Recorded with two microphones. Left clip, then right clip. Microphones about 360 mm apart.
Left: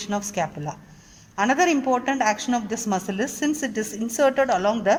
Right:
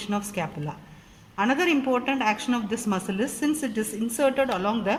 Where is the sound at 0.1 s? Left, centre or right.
Left.